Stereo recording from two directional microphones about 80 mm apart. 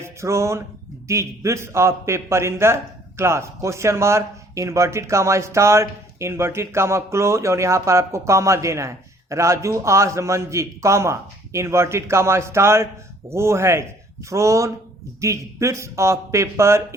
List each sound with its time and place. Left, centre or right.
0.0 s a man's voice: right